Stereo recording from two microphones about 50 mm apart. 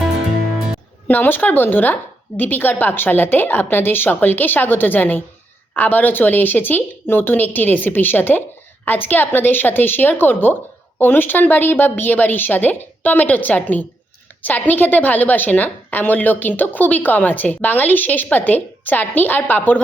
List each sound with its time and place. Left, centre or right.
1.0 s a woman's voice: left